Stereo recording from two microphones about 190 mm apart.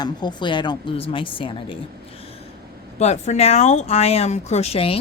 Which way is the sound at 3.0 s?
35° left (ahead or behind).